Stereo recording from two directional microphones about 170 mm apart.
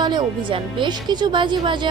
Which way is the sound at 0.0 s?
25° right (ahead or behind).